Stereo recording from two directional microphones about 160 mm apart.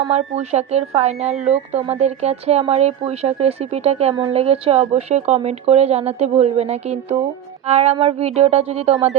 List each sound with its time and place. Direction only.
0.1 s a woman's voice: 45° right (ahead or behind)